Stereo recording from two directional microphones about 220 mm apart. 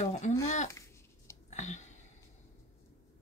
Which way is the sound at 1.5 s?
30° left (ahead or behind).